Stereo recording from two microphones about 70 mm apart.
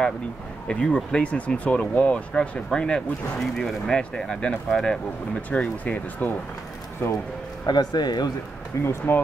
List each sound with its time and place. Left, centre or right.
0.7 s speech: centre
7.6 s a man's voice: left
8.8 s speech: left